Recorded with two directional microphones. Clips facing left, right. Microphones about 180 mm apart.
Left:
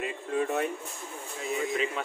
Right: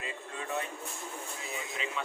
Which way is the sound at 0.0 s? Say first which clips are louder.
Left 11 dB; 60° left (ahead or behind).